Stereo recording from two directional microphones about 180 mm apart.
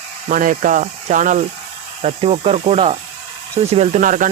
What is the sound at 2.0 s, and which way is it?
Speech, 35° right (ahead or behind).